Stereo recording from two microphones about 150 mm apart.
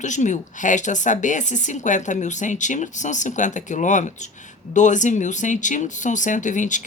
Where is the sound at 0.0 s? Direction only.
55° left (ahead or behind).